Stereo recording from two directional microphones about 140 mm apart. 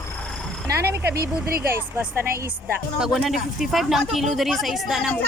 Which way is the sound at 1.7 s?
15° right (ahead or behind).